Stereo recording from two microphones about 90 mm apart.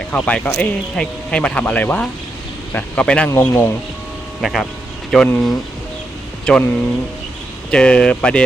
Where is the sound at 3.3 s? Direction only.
25° left (ahead or behind).